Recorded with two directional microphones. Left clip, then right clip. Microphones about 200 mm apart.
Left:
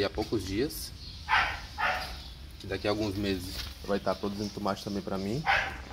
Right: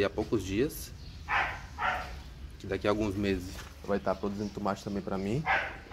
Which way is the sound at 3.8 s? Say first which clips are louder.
Even; 5° left (ahead or behind).